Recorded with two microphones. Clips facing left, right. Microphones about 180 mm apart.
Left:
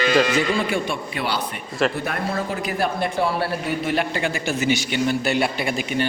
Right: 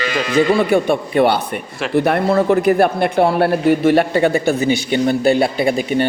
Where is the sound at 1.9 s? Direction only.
70° right (ahead or behind).